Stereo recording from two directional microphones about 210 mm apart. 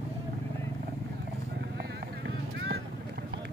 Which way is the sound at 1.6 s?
55° right (ahead or behind).